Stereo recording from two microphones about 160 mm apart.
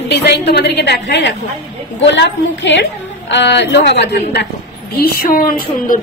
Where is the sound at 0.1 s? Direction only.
90° left.